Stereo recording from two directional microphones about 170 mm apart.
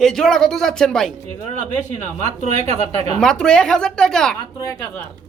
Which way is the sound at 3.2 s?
5° left (ahead or behind).